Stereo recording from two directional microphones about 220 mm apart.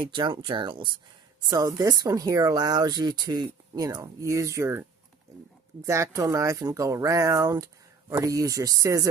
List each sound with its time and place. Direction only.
0.0 s speech: 20° right (ahead or behind)